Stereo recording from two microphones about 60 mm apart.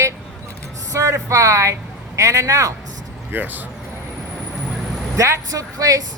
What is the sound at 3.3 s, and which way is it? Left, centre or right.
Speech, right.